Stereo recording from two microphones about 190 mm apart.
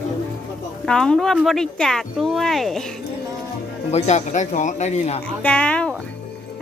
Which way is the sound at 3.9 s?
40° left (ahead or behind).